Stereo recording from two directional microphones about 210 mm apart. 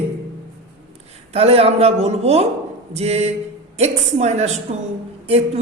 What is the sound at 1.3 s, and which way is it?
A woman's voice, 30° right (ahead or behind).